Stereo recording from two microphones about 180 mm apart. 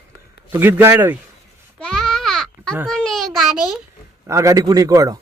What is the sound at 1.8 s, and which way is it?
Sheep, 5° left (ahead or behind).